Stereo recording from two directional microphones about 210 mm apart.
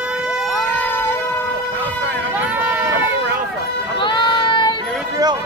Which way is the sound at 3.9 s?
20° left (ahead or behind).